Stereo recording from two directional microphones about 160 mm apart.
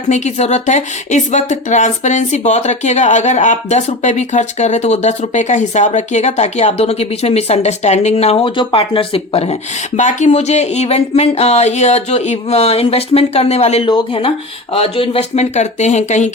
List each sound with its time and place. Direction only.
0.1 s a woman's voice: 45° left (ahead or behind)
10.0 s speech: 50° left (ahead or behind)